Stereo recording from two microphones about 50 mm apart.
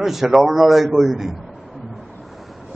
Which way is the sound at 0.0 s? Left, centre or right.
Centre.